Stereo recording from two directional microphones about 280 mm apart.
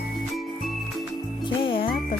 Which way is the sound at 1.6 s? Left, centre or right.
Centre.